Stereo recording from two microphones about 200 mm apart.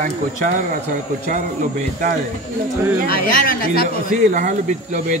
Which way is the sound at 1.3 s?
40° right (ahead or behind).